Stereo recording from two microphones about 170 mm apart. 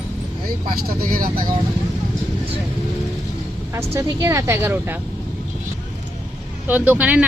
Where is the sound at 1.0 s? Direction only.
55° right (ahead or behind).